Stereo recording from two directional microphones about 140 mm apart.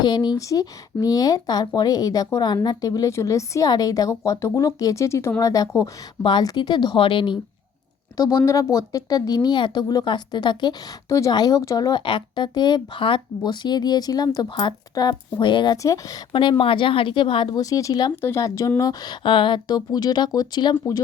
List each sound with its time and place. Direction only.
0.0 s speech: 30° left (ahead or behind)
8.1 s speech: 25° left (ahead or behind)
16.3 s speech: 35° left (ahead or behind)